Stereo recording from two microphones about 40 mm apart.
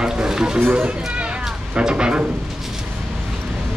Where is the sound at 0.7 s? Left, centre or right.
Right.